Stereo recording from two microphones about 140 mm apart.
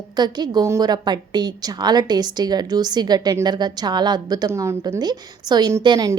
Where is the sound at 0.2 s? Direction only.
30° right (ahead or behind).